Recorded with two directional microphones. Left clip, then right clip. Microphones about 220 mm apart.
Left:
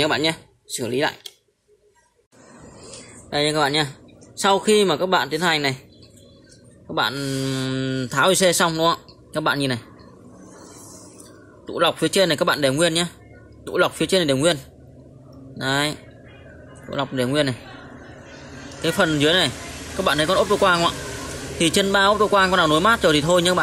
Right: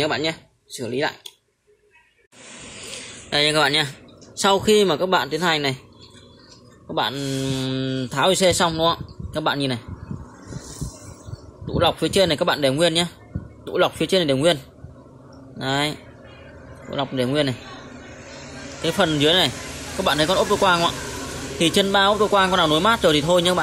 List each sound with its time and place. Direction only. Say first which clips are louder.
0.0 s speech: left 2 dB; 10° left (ahead or behind)
3.3 s speech: right 2 dB; 5° left (ahead or behind)
6.9 s speech: left 1 dB; 5° left (ahead or behind)
11.6 s speech: even; 5° left (ahead or behind)
18.8 s speech: even; 5° left (ahead or behind)